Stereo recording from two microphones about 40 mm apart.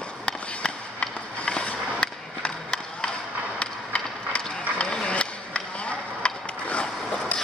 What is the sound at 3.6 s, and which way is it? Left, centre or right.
Mechanisms, left.